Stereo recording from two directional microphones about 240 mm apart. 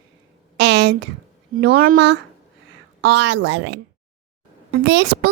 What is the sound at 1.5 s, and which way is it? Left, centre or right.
A child's voice, right.